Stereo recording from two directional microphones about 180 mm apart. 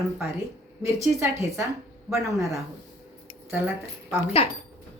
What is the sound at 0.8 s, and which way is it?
Speech, 15° right (ahead or behind).